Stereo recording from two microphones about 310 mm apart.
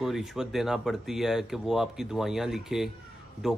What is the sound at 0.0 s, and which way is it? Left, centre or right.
Speech, centre.